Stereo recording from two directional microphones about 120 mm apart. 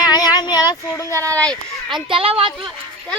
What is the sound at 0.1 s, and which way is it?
Child singing, 35° left (ahead or behind).